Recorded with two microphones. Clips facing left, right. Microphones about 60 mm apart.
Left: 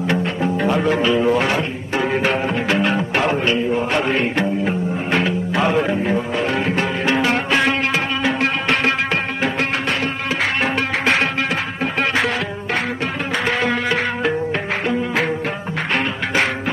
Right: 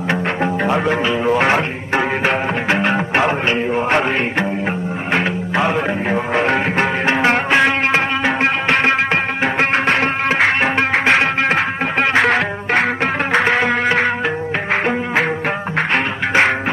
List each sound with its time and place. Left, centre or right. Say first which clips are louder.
0.7 s speech: left 1 dB; centre
1.4 s speech: right 4 dB; right
2.2 s music: right 2 dB; right
3.7 s mantra: right 2 dB; right
5.6 s speech: even; centre
5.9 s music: even; right
6.3 s music: right 3 dB; right
9.8 s music: right 5 dB; right
10.6 s music: right 4 dB; right
12.3 s music: right 6 dB; right
15.9 s music: right 1 dB; right